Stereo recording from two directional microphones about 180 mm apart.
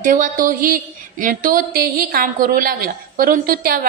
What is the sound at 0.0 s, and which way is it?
A woman's voice, 45° right (ahead or behind).